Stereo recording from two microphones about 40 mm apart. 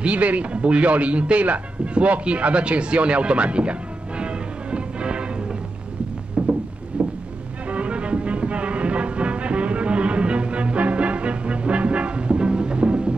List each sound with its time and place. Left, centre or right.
0.0 s a man's voice: right
4.2 s music: right
6.4 s rowboat: right
6.9 s boat: right
7.7 s music: right